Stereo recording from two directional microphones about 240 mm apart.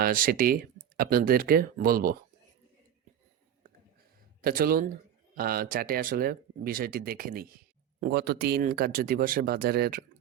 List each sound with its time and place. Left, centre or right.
0.0 s speech: right
4.4 s speech: right